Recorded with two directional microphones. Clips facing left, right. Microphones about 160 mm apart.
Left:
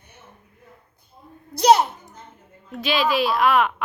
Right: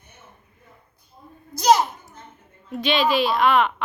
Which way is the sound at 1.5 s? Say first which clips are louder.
Left 2 dB; 60° left (ahead or behind).